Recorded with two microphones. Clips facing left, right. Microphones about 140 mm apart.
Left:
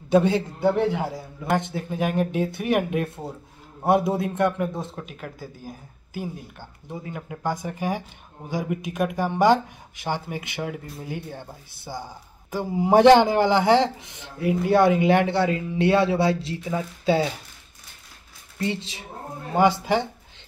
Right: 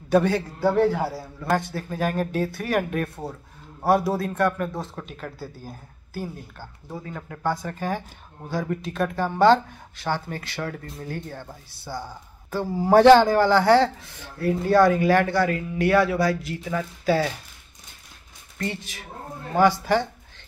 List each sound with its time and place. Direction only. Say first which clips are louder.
0.1 s a woman's voice: left 1 dB; 20° left (ahead or behind)
5.0 s a woman's voice: right 1 dB; 10° left (ahead or behind)
18.6 s a woman's voice: left 3 dB; 25° left (ahead or behind)